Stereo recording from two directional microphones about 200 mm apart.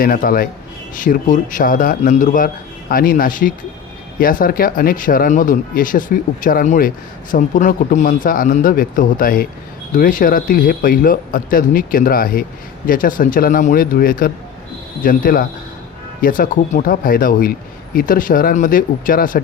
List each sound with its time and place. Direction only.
0.0 s a man's voice: 45° left (ahead or behind)